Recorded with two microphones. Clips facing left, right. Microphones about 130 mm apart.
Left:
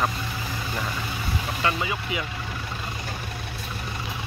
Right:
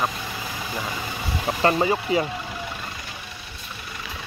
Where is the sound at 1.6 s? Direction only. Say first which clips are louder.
Right 8 dB; 40° right (ahead or behind).